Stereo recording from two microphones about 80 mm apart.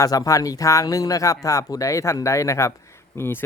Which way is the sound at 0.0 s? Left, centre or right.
Left.